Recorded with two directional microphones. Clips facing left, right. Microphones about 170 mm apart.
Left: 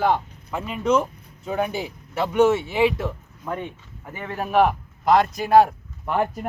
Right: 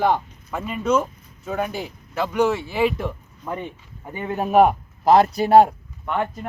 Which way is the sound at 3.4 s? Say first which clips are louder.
Even; 10° right (ahead or behind).